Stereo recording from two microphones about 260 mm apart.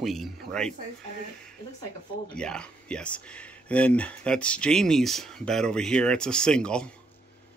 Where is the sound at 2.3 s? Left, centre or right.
Centre.